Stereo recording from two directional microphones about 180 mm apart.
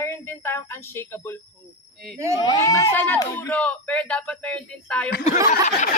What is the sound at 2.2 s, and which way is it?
Speech, 15° right (ahead or behind).